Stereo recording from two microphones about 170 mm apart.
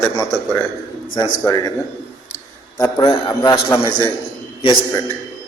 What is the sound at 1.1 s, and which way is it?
Speech, 20° left (ahead or behind).